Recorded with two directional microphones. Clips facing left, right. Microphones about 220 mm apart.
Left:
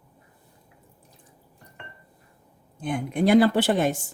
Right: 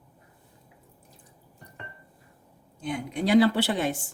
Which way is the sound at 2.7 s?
50° left (ahead or behind).